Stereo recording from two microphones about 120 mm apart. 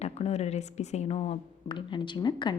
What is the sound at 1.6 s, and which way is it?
Speech, 40° left (ahead or behind).